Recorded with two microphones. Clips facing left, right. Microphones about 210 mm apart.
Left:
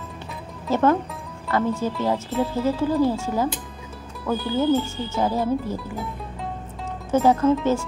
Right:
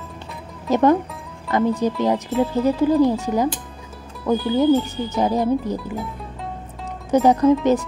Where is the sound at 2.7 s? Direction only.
15° right (ahead or behind).